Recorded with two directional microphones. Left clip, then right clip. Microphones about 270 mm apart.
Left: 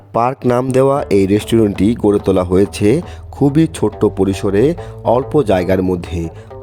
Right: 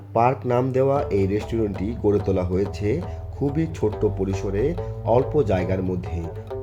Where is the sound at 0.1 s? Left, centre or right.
Left.